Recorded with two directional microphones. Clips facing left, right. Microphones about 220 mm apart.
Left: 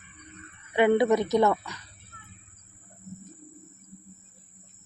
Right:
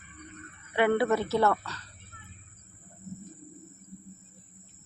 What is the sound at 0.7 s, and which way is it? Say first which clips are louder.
Speech: left 4 dB; 15° left (ahead or behind).